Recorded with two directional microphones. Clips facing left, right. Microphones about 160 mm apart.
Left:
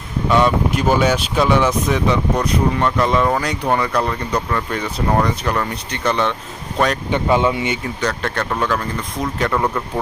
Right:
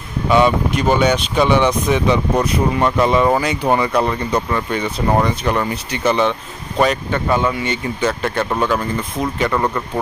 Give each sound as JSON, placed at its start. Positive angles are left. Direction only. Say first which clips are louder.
{"t": 0.3, "sound": "speech", "louder": "right 2 dB", "side_deg": 0}
{"t": 2.4, "sound": "speech", "louder": "right 1 dB", "side_deg": -5}
{"t": 7.1, "sound": "speech", "louder": "left 1 dB", "side_deg": 20}
{"t": 8.0, "sound": "speech", "louder": "right 3 dB", "side_deg": -5}